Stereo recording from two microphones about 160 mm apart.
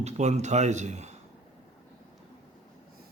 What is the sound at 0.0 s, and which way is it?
Speech, 45° right (ahead or behind).